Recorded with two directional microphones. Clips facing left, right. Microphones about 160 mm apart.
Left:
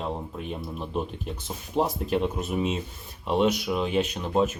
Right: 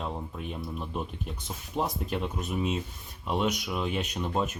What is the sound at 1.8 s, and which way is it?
Speech, 25° left (ahead or behind).